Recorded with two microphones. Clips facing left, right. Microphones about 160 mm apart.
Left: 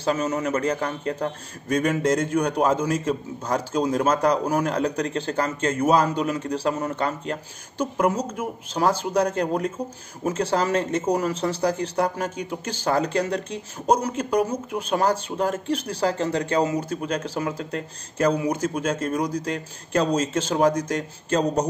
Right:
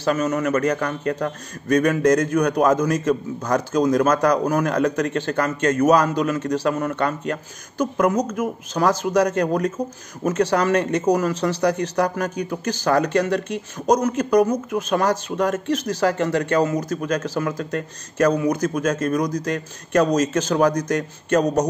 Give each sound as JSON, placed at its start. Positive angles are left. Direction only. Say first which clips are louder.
{"t": 0.1, "sound": "a man's voice", "louder": "right 3 dB", "side_deg": 25}